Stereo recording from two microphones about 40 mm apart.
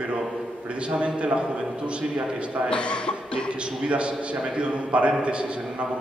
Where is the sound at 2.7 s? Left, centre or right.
Left.